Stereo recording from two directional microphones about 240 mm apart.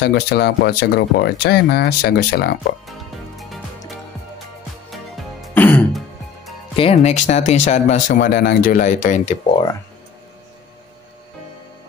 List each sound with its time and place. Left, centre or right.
0.0 s speech: left
2.9 s music: centre
4.9 s music: centre
6.8 s speech: left